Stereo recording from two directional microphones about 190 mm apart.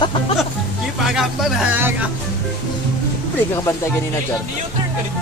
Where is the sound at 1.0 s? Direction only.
Centre (ahead or behind).